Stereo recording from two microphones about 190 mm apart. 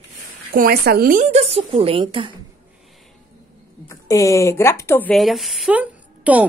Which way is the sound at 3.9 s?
15° left (ahead or behind).